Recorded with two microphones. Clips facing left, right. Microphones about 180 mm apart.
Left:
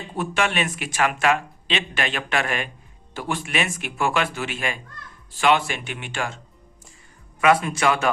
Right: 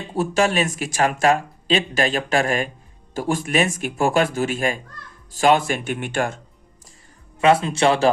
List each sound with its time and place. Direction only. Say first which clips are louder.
0.2 s speech: right 5 dB; 40° right (ahead or behind)
7.3 s speech: right 2 dB; 25° right (ahead or behind)